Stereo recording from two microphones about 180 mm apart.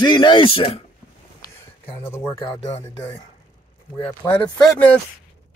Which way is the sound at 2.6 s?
40° left (ahead or behind).